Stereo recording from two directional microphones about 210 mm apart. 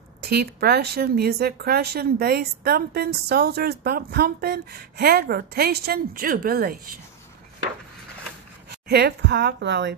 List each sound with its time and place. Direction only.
0.2 s speech: 50° right (ahead or behind)
8.6 s a woman's voice: 50° right (ahead or behind)